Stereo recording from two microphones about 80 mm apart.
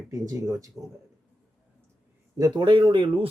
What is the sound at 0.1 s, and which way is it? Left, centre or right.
Speech, right.